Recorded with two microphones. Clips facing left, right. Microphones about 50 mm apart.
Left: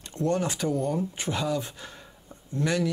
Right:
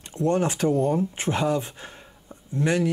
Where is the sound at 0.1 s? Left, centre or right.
Right.